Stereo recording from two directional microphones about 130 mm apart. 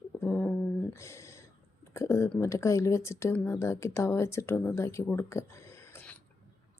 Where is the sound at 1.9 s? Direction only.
20° left (ahead or behind).